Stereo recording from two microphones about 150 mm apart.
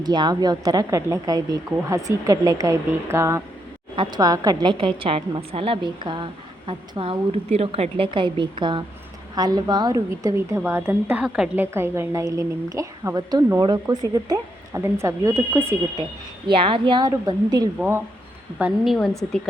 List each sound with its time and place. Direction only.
0.0 s speech: 30° right (ahead or behind)
3.9 s a woman's voice: 30° right (ahead or behind); by 15.7 s 15° right (ahead or behind)
16.5 s a woman's voice: 35° right (ahead or behind)
17.7 s a woman's voice: 15° right (ahead or behind)
18.9 s a woman's voice: 5° left (ahead or behind)